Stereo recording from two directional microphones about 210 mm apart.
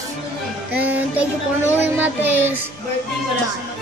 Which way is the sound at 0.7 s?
10° right (ahead or behind).